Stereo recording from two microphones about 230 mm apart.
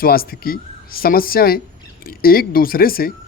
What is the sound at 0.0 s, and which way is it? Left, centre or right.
Speech, left.